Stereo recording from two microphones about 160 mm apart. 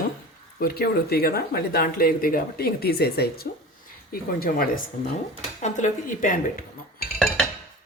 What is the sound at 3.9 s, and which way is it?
Speech, 65° left (ahead or behind).